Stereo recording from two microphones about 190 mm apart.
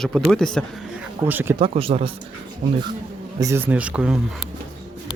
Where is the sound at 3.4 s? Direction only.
15° right (ahead or behind).